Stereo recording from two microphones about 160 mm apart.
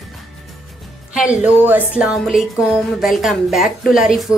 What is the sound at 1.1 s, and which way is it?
A woman's voice, 5° right (ahead or behind).